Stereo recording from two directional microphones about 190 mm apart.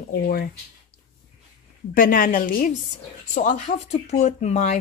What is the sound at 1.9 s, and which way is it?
Speech, 45° left (ahead or behind).